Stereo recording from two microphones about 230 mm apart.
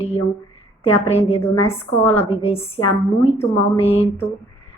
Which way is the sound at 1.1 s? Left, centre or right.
Left.